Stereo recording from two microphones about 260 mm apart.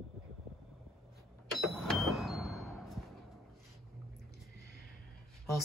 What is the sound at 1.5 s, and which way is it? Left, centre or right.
Vehicle, centre.